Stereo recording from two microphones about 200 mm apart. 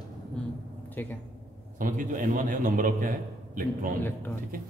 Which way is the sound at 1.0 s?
10° left (ahead or behind).